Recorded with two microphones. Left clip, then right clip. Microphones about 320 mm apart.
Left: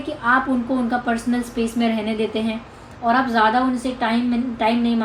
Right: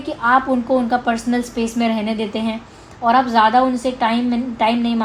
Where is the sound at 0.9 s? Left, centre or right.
Centre.